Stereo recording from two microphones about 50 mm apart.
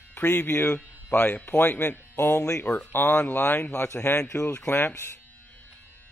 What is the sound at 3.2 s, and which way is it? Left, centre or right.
Speech, left.